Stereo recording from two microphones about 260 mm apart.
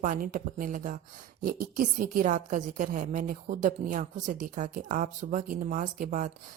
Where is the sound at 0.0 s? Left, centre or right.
Right.